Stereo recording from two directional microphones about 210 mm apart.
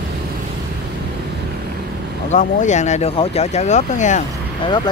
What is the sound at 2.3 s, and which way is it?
Speech, 35° left (ahead or behind).